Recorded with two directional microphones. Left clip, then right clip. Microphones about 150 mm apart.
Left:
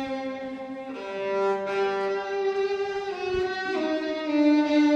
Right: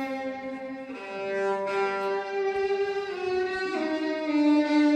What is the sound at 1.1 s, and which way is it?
Music, 20° right (ahead or behind).